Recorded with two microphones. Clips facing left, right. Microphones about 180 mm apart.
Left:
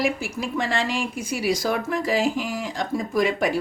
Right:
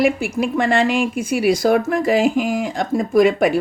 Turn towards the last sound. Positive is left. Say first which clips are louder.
# right 8 dB
turn(degrees=-55)  # may be behind; listen again after turning